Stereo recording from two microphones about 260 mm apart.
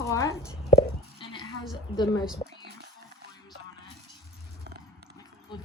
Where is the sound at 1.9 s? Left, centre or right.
Centre.